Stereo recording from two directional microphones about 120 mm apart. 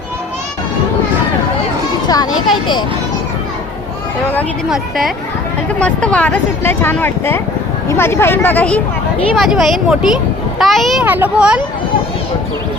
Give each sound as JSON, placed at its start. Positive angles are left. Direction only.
{"t": 2.0, "sound": "children playing", "side_deg": 35}
{"t": 4.7, "sound": "speech", "side_deg": 0}
{"t": 5.8, "sound": "speech", "side_deg": 10}
{"t": 9.3, "sound": "speech", "side_deg": 0}
{"t": 11.0, "sound": "speech", "side_deg": -15}